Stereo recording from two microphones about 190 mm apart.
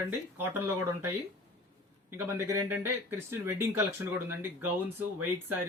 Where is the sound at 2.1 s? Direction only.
10° right (ahead or behind).